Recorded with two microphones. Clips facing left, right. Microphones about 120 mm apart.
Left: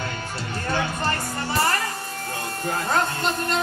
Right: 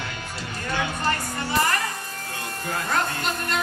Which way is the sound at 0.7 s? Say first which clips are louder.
Even; 35° left (ahead or behind).